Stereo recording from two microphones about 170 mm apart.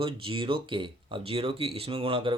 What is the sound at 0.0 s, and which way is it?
Speech, 30° right (ahead or behind).